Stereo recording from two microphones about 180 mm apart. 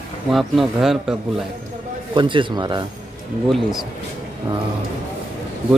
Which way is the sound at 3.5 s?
Centre (ahead or behind).